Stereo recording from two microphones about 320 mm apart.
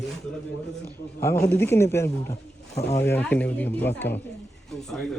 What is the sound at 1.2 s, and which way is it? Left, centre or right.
Speech, centre.